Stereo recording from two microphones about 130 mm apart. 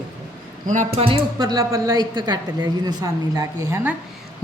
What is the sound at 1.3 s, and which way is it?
A woman's voice, 30° right (ahead or behind).